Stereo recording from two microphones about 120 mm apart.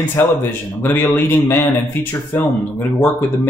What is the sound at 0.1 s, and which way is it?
Speech, 20° left (ahead or behind).